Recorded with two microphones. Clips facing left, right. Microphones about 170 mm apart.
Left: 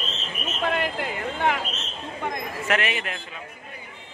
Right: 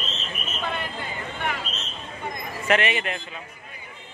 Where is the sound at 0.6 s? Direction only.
90° left.